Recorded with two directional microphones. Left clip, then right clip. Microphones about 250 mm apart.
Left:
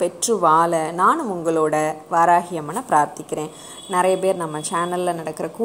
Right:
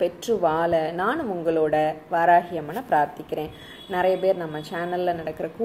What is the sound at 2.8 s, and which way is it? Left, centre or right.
Speech, left.